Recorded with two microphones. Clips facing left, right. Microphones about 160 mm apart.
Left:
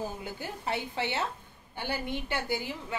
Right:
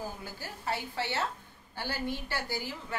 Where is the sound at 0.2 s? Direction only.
20° left (ahead or behind).